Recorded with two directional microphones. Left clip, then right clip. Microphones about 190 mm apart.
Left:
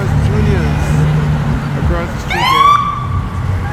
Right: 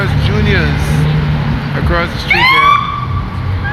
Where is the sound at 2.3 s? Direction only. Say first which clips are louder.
Right 6 dB; 50° left (ahead or behind).